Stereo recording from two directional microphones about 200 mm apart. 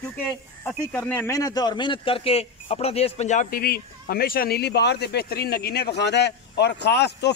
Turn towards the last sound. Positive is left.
turn(degrees=55)  # may be behind; listen again after turning